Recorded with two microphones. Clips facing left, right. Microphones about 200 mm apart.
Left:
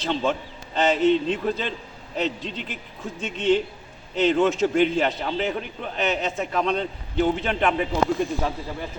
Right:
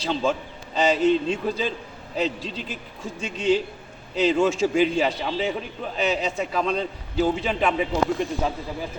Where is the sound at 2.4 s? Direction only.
35° right (ahead or behind).